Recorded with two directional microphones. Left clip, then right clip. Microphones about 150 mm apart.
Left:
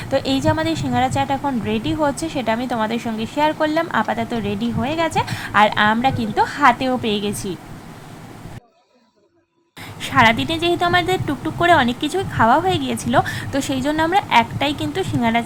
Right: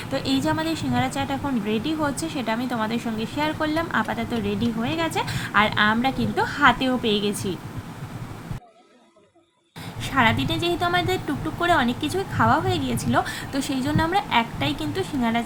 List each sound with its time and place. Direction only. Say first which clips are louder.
0.0 s speech: left 6 dB; 40° left (ahead or behind)
10.0 s speech: left 6 dB; 45° left (ahead or behind)